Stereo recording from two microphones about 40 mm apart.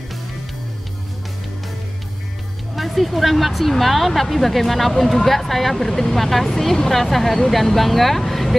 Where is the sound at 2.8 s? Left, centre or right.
Centre.